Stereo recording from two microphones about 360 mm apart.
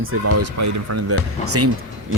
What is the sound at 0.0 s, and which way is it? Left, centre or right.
Speech, right.